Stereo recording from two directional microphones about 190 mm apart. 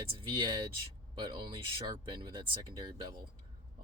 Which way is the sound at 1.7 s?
25° right (ahead or behind).